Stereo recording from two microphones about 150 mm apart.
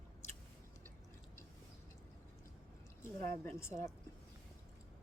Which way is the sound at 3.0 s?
20° left (ahead or behind).